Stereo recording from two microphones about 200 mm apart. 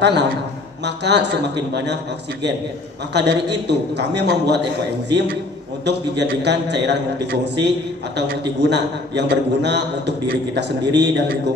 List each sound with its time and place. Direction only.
0.0 s a man's voice: 60° right (ahead or behind)
3.1 s a man's voice: 60° right (ahead or behind)
5.9 s a man's voice: 60° right (ahead or behind)